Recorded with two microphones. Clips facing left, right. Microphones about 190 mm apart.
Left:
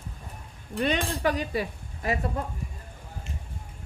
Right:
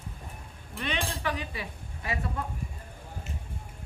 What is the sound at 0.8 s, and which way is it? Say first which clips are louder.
Speech: left 7 dB; 40° left (ahead or behind).